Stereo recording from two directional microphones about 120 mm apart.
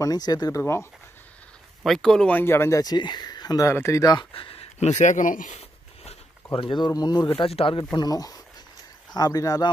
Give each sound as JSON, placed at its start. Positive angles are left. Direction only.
{"t": 0.0, "sound": "speech", "side_deg": 35}
{"t": 0.6, "sound": "speech", "side_deg": 25}
{"t": 1.9, "sound": "speech", "side_deg": 5}
{"t": 2.4, "sound": "speech", "side_deg": 20}
{"t": 2.8, "sound": "speech", "side_deg": 35}
{"t": 4.3, "sound": "speech", "side_deg": 50}
{"t": 7.4, "sound": "speech", "side_deg": 50}